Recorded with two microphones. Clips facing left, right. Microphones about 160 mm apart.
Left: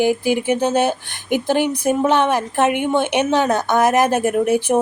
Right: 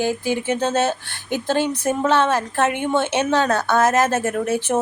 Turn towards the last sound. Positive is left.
turn(degrees=15)  # may be behind; listen again after turning